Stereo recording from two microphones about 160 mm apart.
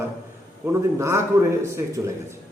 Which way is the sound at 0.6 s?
15° right (ahead or behind).